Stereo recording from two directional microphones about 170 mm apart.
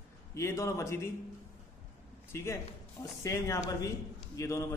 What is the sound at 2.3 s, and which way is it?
A man's voice, 15° left (ahead or behind).